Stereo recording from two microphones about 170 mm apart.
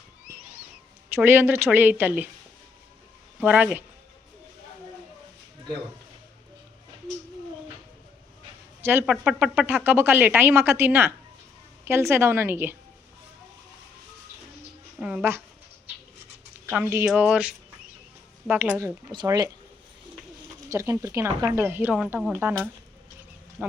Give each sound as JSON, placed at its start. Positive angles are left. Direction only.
{"t": 1.1, "sound": "speech", "side_deg": -15}
{"t": 3.4, "sound": "speech", "side_deg": -10}
{"t": 8.8, "sound": "speech", "side_deg": -15}
{"t": 14.9, "sound": "speech", "side_deg": -5}
{"t": 16.6, "sound": "speech", "side_deg": -15}
{"t": 19.1, "sound": "speech", "side_deg": -25}
{"t": 20.7, "sound": "speech", "side_deg": -15}
{"t": 23.6, "sound": "speech", "side_deg": -5}